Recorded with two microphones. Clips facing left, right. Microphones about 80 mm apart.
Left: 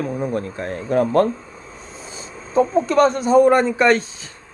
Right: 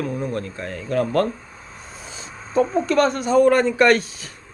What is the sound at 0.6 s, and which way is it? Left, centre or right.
Speech, left.